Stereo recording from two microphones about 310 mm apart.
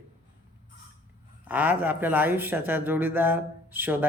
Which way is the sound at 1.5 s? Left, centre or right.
Centre.